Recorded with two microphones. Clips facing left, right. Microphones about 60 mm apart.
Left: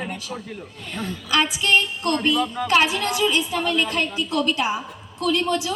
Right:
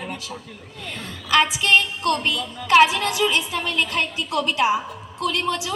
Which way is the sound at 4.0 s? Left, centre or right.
Right.